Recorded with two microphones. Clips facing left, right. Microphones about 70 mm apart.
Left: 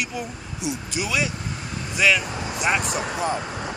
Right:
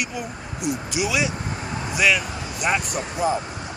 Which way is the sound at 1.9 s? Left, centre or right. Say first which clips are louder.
Even; centre.